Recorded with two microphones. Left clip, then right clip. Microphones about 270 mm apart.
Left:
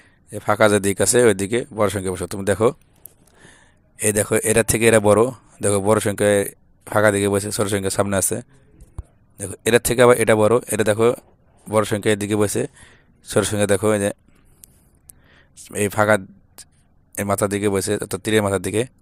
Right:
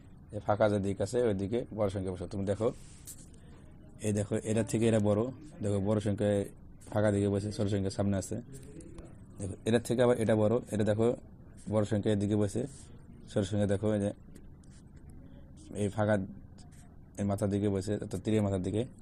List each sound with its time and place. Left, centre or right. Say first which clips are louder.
0.3 s speech: left 12 dB; left
3.9 s speech: left 15 dB; left
9.4 s speech: left 14 dB; left
15.7 s speech: left 14 dB; left